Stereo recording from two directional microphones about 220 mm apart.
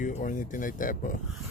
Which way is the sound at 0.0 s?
35° left (ahead or behind).